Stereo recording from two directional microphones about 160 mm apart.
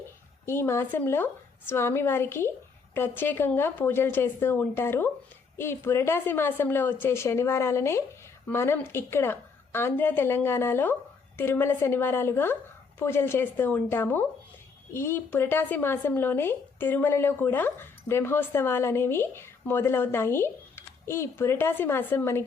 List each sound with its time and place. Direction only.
0.4 s speech: 15° left (ahead or behind)